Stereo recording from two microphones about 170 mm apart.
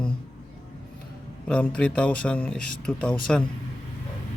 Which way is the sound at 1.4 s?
5° left (ahead or behind).